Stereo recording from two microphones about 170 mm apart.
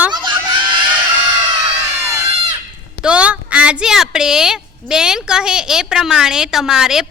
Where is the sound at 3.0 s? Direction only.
5° right (ahead or behind).